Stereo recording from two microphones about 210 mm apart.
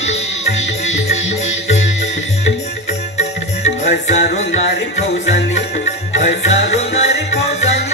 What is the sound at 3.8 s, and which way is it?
Music, 35° left (ahead or behind).